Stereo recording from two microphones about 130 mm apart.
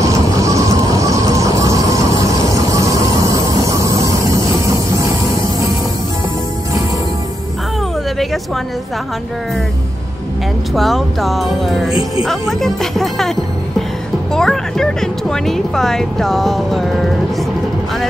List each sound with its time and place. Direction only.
0.0 s a sound: 25° right (ahead or behind)
10.7 s speech: centre (ahead or behind)
14.3 s speech: 5° left (ahead or behind)